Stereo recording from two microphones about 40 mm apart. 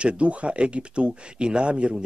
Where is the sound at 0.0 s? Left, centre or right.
Right.